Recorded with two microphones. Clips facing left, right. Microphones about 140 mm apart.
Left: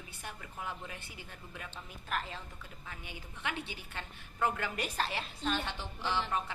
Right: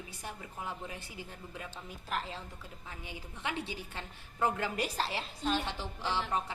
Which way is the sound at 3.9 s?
20° right (ahead or behind).